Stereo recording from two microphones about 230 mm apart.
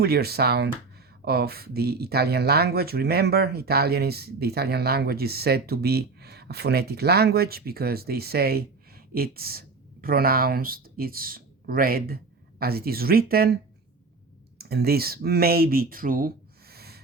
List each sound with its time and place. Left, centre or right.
0.0 s speech: right
14.6 s speech: right